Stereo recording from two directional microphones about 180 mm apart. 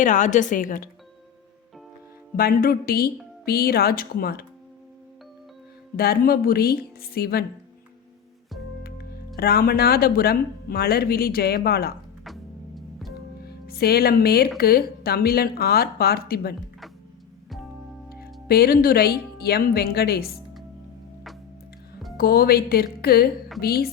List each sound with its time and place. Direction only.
0.0 s a woman's voice: 45° left (ahead or behind)
2.3 s speech: 55° left (ahead or behind)
6.0 s speech: 60° left (ahead or behind)
8.8 s speech: 60° left (ahead or behind)
12.2 s music: centre (ahead or behind)
13.4 s speech: 60° left (ahead or behind)
18.1 s speech: 60° left (ahead or behind)
22.2 s speech: 55° left (ahead or behind)